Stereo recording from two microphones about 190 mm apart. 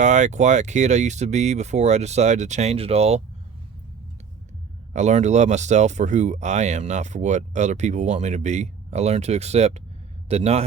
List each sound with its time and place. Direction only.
0.0 s speech: 40° right (ahead or behind)
4.9 s speech: 35° right (ahead or behind)